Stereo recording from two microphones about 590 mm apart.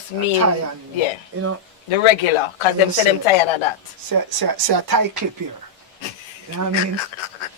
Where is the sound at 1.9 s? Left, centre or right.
Left.